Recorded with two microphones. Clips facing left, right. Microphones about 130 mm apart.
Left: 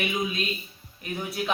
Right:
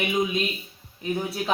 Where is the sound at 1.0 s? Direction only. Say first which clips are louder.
Right 5 dB; 30° right (ahead or behind).